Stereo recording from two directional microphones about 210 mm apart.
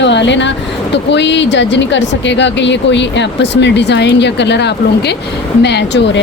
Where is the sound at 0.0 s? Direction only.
55° left (ahead or behind).